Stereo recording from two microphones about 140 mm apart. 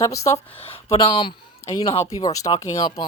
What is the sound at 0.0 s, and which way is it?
Speech, 20° left (ahead or behind).